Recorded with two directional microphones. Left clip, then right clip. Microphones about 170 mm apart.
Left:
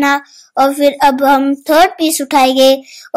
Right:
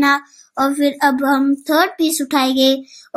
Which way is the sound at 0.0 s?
25° left (ahead or behind).